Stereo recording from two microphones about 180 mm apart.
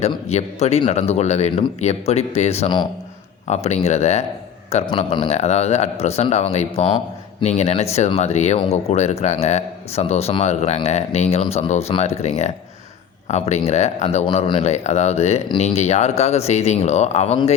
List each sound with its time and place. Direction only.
0.0 s speech: 35° left (ahead or behind)